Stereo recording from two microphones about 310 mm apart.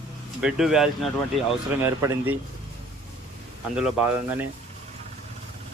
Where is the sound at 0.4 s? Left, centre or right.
Centre.